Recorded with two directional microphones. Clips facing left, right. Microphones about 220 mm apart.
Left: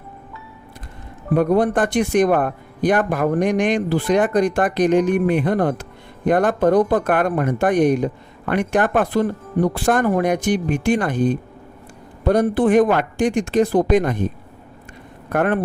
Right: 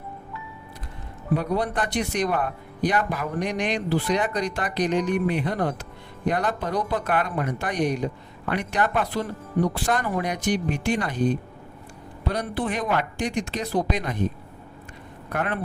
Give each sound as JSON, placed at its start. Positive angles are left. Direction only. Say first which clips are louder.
{"t": 1.3, "sound": "speech", "louder": "left 8 dB", "side_deg": 50}
{"t": 15.3, "sound": "speech", "louder": "left 9 dB", "side_deg": 50}